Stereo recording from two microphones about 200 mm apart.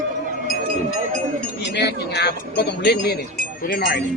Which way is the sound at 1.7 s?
55° left (ahead or behind).